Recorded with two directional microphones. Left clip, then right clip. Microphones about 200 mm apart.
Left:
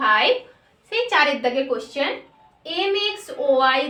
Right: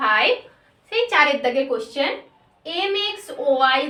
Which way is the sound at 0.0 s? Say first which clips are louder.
Even; 15° left (ahead or behind).